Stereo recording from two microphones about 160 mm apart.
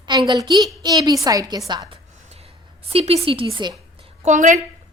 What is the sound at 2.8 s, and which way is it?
Speech, 40° right (ahead or behind).